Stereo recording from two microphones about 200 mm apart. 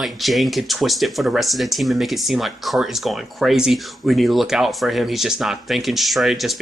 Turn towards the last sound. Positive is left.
turn(degrees=0)  # may be behind; listen again after turning